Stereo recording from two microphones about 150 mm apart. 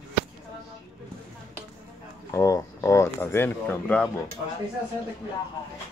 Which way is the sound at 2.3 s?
20° left (ahead or behind).